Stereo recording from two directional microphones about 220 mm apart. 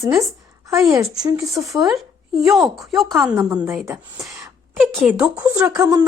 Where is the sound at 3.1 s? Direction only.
10° right (ahead or behind).